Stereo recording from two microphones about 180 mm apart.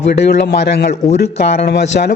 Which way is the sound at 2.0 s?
55° left (ahead or behind).